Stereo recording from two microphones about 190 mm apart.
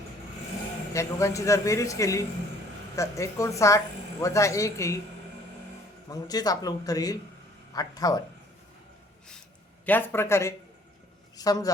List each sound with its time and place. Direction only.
0.9 s speech: 15° left (ahead or behind)
6.1 s a man's voice: 20° left (ahead or behind)
9.8 s a man's voice: 10° left (ahead or behind)